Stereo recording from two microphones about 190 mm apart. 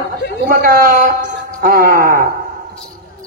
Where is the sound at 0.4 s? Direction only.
50° right (ahead or behind).